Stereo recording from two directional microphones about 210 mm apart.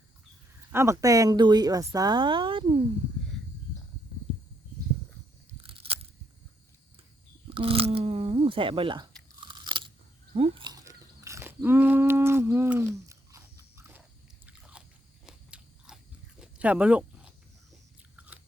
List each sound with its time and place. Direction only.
0.7 s speech: 15° right (ahead or behind)
5.6 s crunch: 25° right (ahead or behind)
7.5 s speech: 25° right (ahead or behind)
9.4 s crunch: 20° right (ahead or behind)
14.4 s biting: 5° right (ahead or behind)
16.4 s a sound: 5° right (ahead or behind)
18.2 s biting: 5° right (ahead or behind)